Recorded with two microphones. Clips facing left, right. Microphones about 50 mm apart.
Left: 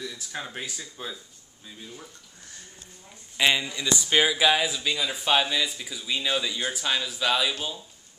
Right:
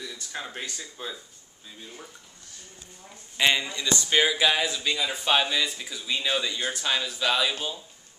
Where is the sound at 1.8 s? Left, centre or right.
Centre.